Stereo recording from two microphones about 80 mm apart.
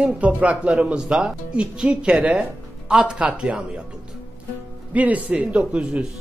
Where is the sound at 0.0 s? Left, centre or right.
Centre.